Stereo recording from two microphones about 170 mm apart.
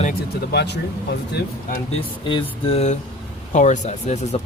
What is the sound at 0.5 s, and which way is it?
Speech, 75° left (ahead or behind).